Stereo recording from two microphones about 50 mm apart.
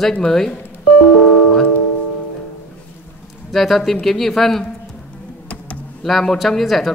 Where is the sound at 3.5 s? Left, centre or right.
Centre.